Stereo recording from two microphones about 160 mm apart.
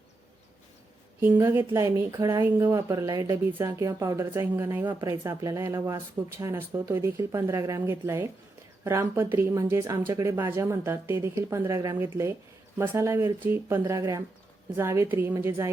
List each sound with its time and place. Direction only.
1.4 s speech: 15° right (ahead or behind)